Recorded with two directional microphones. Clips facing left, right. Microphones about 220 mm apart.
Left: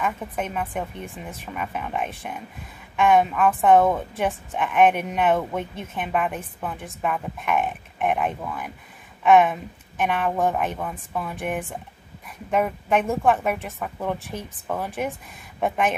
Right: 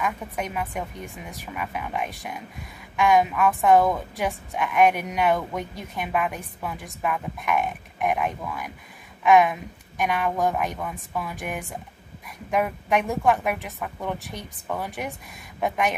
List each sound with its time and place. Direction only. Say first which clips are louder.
0.0 s a woman's voice: left 1 dB; 5° right (ahead or behind)